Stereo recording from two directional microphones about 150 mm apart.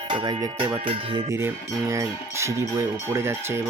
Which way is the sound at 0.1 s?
30° right (ahead or behind).